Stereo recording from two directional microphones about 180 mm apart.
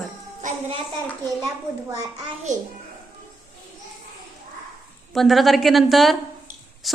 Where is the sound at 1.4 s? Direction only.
20° right (ahead or behind).